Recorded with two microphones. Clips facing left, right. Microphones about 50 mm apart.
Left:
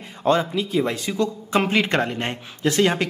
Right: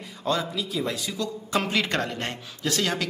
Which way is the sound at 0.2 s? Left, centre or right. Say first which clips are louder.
Left 7 dB; left.